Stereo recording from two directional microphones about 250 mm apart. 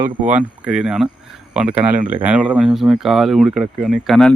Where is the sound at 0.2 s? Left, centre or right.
Centre.